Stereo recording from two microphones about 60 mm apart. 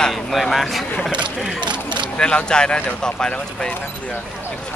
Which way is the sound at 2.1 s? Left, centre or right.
Centre.